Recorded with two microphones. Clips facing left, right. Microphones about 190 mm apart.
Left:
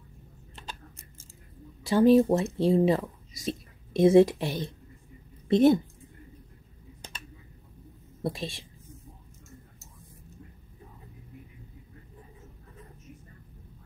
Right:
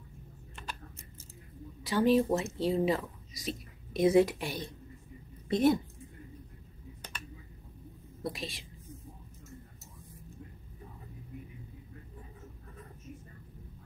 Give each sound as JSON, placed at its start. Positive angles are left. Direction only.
{"t": 1.9, "sound": "speech", "side_deg": 35}
{"t": 8.2, "sound": "a woman's voice", "side_deg": 25}